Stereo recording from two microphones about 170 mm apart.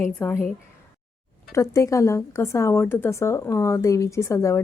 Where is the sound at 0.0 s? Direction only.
10° left (ahead or behind).